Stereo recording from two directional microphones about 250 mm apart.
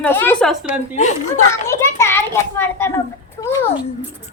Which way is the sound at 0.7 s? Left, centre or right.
Left.